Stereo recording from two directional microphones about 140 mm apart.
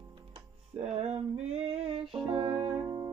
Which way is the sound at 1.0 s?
50° right (ahead or behind).